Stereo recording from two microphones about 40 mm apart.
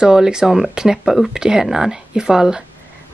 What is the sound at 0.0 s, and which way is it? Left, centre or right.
Speech, centre.